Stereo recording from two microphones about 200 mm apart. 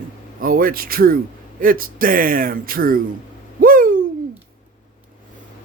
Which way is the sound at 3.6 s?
45° right (ahead or behind).